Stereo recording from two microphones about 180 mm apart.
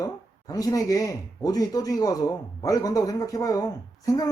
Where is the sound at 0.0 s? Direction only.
20° left (ahead or behind).